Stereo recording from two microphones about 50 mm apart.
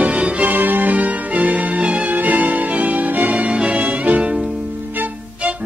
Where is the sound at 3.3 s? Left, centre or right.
Right.